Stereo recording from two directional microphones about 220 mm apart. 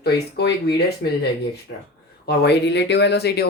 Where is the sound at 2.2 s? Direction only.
50° left (ahead or behind).